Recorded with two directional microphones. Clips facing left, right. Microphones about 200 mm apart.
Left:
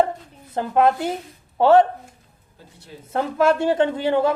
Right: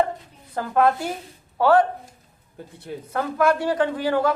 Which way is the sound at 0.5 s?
20° left (ahead or behind).